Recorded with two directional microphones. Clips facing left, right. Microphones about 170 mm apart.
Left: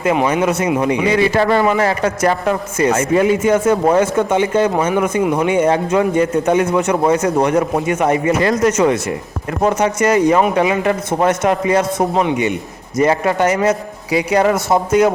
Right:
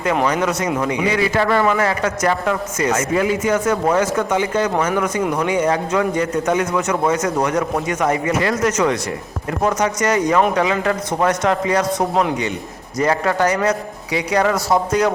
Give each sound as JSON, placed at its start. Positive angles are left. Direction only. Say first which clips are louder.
{"t": 0.8, "sound": "a man's voice", "louder": "left 4 dB", "side_deg": 30}
{"t": 5.2, "sound": "speech", "louder": "left 4 dB", "side_deg": 5}
{"t": 5.5, "sound": "a man's voice", "louder": "left 4 dB", "side_deg": 25}